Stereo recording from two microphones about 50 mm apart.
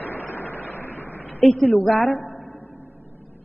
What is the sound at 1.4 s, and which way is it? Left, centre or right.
Speech, centre.